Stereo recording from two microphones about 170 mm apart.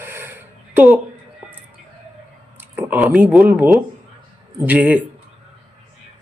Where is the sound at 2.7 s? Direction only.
10° right (ahead or behind).